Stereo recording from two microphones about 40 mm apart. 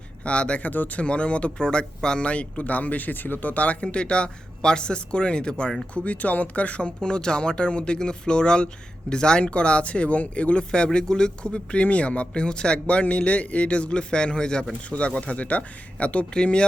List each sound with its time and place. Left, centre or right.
0.3 s a man's voice: left
2.2 s speech: left
3.5 s a man's voice: left
5.9 s speech: left
7.1 s a man's voice: left